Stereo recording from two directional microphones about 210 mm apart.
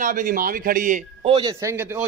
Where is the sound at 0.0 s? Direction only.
40° right (ahead or behind).